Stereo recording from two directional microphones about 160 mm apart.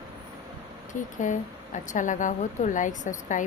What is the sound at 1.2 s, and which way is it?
A woman's voice, 50° left (ahead or behind).